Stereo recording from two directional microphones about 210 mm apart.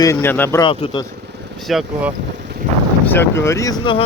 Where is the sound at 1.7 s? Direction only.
Centre (ahead or behind).